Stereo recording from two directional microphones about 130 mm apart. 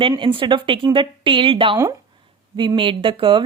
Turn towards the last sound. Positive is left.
turn(degrees=-40)  # may be behind; listen again after turning